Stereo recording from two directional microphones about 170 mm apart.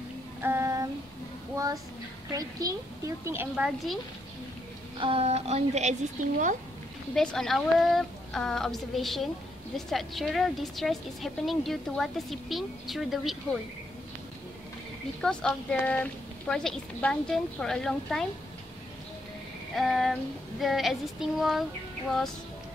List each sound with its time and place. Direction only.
0.4 s child singing: 15° right (ahead or behind)
3.3 s a woman's voice: 10° right (ahead or behind)
4.9 s speech: 30° right (ahead or behind)
7.2 s a woman's voice: 5° left (ahead or behind)
15.2 s a woman's voice: 5° left (ahead or behind)
19.7 s a sound: centre (ahead or behind)
20.6 s a woman's voice: centre (ahead or behind)